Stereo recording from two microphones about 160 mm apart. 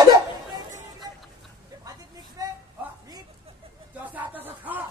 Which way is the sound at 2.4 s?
20° right (ahead or behind).